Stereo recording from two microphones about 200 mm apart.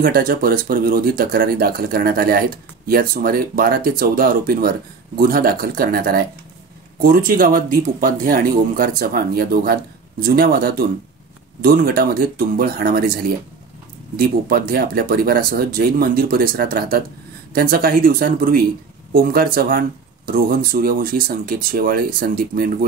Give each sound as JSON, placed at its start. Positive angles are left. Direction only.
{"t": 0.0, "sound": "speech", "side_deg": -45}